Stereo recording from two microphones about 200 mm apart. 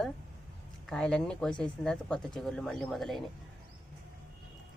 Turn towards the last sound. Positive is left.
turn(degrees=0)  # may be behind; listen again after turning